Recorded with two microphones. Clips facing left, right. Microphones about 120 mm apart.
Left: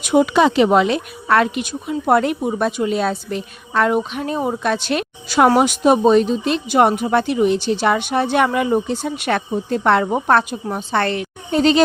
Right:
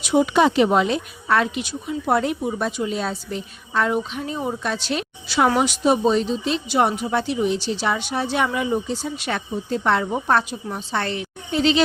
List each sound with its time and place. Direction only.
0.0 s speech: 65° left (ahead or behind)
11.5 s speech: 45° left (ahead or behind)